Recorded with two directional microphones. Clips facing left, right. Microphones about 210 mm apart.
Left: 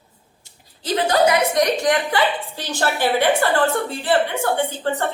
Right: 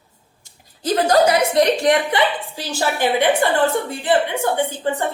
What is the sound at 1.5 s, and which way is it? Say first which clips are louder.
Speech: right 3 dB; 30° right (ahead or behind).